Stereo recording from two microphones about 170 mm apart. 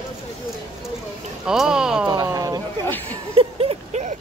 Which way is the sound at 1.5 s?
5° right (ahead or behind).